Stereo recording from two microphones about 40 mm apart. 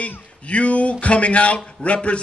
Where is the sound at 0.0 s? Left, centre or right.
Left.